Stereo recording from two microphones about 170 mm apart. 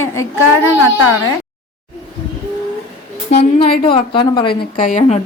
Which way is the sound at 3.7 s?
30° left (ahead or behind).